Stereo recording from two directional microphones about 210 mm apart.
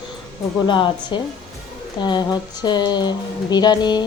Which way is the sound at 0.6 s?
20° left (ahead or behind).